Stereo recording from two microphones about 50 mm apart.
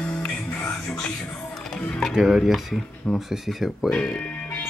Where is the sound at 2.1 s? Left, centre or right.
Centre.